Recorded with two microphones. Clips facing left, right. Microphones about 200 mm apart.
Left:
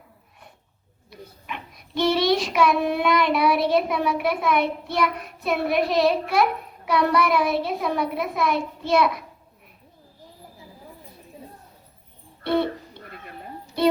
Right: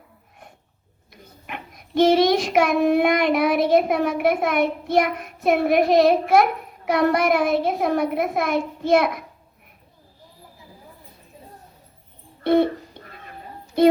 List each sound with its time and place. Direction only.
1.5 s child singing: 50° right (ahead or behind)
12.4 s music: 50° right (ahead or behind)